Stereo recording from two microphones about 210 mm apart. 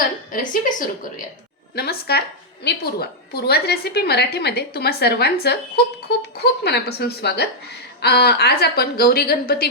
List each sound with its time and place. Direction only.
0.3 s a woman's voice: 40° left (ahead or behind)
1.7 s a woman's voice: 50° left (ahead or behind)